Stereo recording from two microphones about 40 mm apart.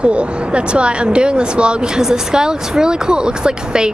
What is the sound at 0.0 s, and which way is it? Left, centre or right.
Speech, right.